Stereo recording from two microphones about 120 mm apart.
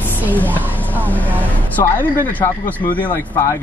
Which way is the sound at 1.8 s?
15° left (ahead or behind).